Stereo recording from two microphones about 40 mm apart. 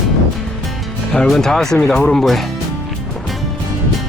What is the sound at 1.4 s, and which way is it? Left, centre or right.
Speech, centre.